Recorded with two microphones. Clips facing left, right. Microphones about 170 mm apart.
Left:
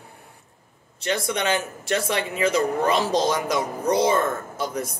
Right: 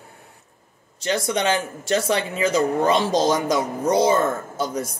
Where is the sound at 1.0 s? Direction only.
30° right (ahead or behind).